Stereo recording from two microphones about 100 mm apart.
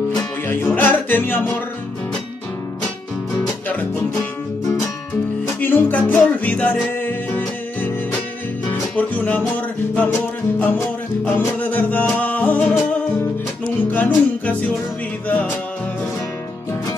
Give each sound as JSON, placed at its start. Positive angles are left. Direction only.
{"t": 0.5, "sound": "music", "side_deg": 20}
{"t": 5.6, "sound": "music", "side_deg": 15}
{"t": 13.8, "sound": "music", "side_deg": 20}